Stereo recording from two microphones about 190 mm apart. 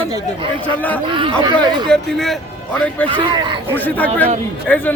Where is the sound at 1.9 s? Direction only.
Centre (ahead or behind).